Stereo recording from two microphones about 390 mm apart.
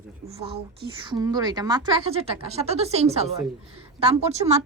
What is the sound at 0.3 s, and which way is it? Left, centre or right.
Speech, centre.